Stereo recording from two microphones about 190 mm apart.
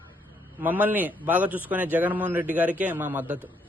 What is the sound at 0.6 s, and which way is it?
A man's voice, 10° right (ahead or behind).